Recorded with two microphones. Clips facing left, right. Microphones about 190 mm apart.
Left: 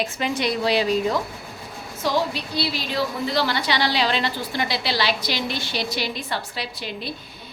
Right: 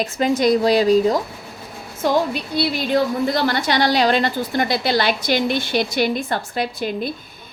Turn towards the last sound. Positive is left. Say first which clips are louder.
# right 8 dB
turn(degrees=-50)  # may be behind; listen again after turning